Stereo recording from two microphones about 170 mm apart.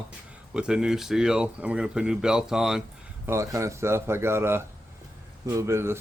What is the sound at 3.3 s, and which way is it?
Speech, 15° right (ahead or behind).